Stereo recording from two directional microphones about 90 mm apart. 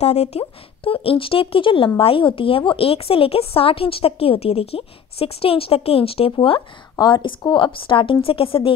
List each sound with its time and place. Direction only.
0.4 s a woman's voice: 90° left; by 1.9 s 75° left (ahead or behind)
2.0 s a woman's voice: 85° left
7.0 s a woman's voice: 60° left (ahead or behind); by 8.7 s 90° left